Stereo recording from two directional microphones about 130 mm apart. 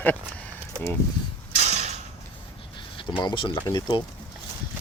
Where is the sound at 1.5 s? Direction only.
60° right (ahead or behind).